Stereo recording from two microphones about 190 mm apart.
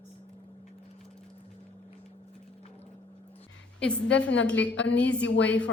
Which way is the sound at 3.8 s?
5° left (ahead or behind).